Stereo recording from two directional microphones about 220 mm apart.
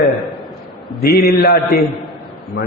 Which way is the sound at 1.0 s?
45° left (ahead or behind).